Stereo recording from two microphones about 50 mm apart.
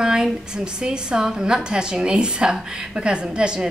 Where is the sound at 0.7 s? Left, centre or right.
Centre.